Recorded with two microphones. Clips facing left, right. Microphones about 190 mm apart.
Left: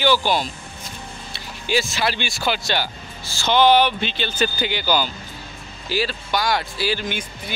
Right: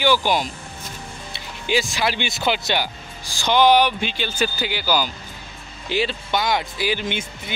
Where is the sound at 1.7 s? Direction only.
15° right (ahead or behind).